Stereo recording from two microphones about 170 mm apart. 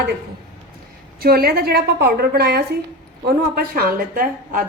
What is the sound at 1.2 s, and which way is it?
A woman's voice, 65° right (ahead or behind).